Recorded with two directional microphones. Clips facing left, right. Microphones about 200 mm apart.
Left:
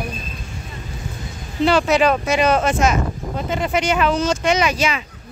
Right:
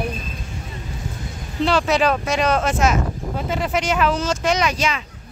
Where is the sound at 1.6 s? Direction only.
Centre (ahead or behind).